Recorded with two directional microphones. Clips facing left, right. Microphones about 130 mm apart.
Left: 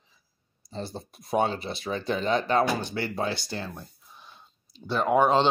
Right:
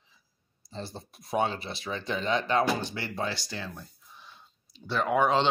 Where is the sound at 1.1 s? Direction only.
40° left (ahead or behind).